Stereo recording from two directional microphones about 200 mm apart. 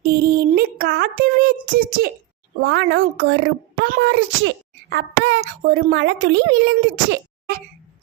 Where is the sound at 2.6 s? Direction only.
60° right (ahead or behind).